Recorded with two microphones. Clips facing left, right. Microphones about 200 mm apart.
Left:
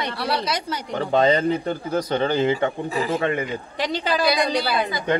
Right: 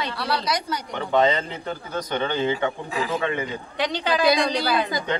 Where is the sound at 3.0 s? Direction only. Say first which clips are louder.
Left 2 dB; 45° left (ahead or behind).